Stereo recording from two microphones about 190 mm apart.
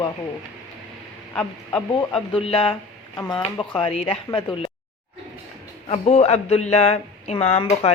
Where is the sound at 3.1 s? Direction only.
15° left (ahead or behind).